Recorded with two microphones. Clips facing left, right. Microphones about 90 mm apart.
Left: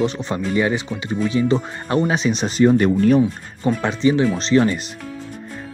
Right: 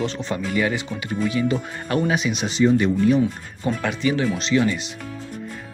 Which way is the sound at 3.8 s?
25° left (ahead or behind).